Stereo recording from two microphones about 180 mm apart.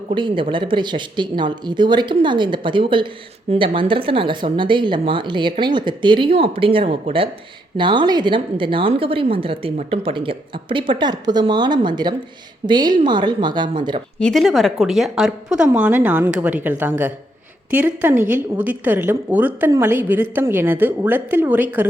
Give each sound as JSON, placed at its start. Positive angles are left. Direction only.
{"t": 0.1, "sound": "a woman's voice", "side_deg": -30}
{"t": 14.2, "sound": "a woman's voice", "side_deg": 5}